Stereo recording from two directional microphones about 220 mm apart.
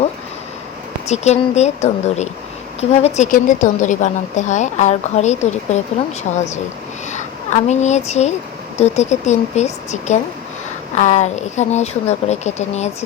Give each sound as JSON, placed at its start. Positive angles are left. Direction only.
{"t": 1.0, "sound": "a woman's voice", "side_deg": 30}